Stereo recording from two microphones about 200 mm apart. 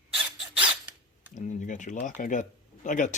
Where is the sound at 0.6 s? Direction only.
5° right (ahead or behind).